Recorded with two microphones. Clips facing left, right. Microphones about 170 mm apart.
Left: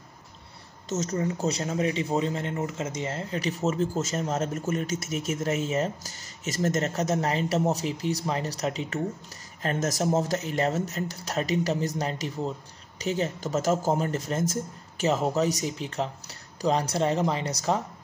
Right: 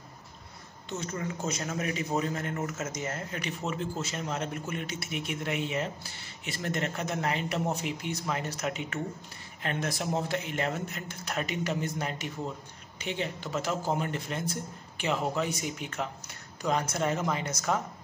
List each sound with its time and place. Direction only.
0.8 s speech: 40° left (ahead or behind)